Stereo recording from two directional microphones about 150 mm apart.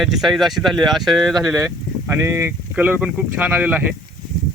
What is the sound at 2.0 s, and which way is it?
Speech, 20° right (ahead or behind).